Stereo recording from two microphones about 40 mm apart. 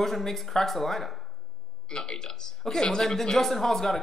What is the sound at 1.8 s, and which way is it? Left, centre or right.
Speech, centre.